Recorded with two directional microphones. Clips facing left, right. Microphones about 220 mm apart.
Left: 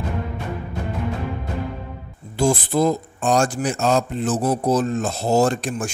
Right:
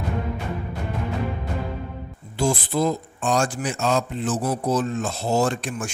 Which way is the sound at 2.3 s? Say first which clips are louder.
Left 4 dB; 45° left (ahead or behind).